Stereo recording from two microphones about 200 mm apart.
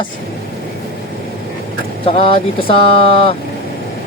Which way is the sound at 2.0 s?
30° left (ahead or behind).